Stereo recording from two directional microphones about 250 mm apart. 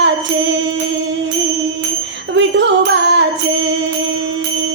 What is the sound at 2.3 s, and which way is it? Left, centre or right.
Music, right.